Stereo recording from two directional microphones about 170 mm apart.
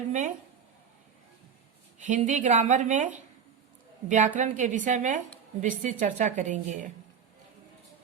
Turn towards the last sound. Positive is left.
turn(degrees=-45)  # may be behind; listen again after turning